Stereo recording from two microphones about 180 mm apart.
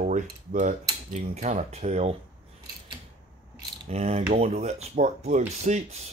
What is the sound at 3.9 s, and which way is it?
Speech, 35° right (ahead or behind).